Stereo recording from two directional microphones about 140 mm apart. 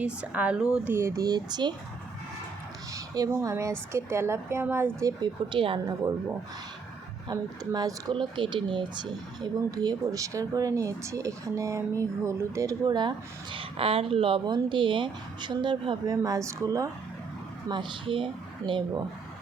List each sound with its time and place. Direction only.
0.0 s speech: 10° right (ahead or behind)
0.9 s speech: 20° right (ahead or behind)
2.9 s speech: 25° right (ahead or behind)
7.3 s a woman's voice: 30° right (ahead or behind)
17.7 s a woman's voice: 35° right (ahead or behind)